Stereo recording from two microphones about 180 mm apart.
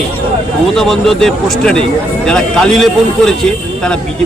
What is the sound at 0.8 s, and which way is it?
Speech, centre (ahead or behind).